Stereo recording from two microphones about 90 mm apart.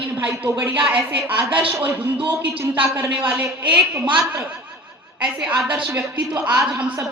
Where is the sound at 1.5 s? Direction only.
15° right (ahead or behind).